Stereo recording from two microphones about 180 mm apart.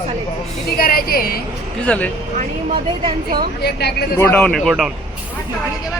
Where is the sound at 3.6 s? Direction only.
65° left (ahead or behind).